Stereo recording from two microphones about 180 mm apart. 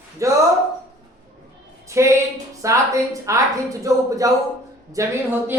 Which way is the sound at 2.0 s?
15° right (ahead or behind).